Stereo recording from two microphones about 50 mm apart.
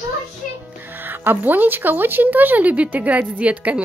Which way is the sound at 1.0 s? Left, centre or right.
Right.